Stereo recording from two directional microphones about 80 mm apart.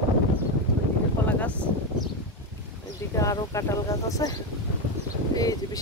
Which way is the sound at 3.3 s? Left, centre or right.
Left.